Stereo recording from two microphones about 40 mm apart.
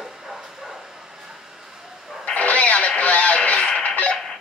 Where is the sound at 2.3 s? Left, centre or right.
Left.